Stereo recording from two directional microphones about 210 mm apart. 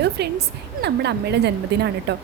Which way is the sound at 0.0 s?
50° right (ahead or behind).